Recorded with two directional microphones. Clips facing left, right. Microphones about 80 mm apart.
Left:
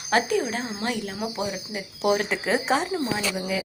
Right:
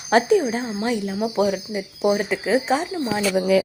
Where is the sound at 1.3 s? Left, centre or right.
Right.